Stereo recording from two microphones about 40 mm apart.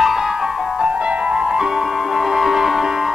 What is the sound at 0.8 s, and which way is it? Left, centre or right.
Music, right.